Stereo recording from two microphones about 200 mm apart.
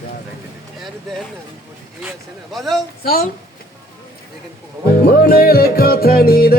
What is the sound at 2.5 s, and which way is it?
Speech, centre (ahead or behind).